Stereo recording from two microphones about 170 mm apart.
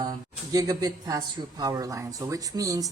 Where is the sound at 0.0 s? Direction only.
20° right (ahead or behind).